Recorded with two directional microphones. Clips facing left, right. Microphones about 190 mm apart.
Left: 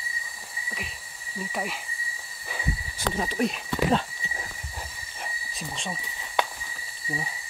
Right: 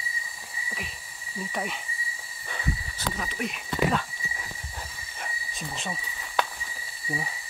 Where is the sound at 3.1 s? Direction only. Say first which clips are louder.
Left 9 dB; 30° left (ahead or behind).